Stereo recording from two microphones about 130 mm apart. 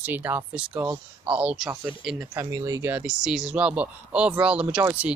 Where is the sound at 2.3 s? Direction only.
25° right (ahead or behind).